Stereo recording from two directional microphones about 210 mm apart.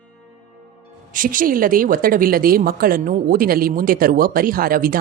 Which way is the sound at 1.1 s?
40° right (ahead or behind).